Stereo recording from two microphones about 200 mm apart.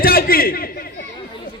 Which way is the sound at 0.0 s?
50° left (ahead or behind).